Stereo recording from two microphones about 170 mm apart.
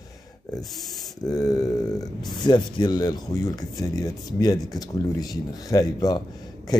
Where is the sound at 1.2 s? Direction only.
20° left (ahead or behind).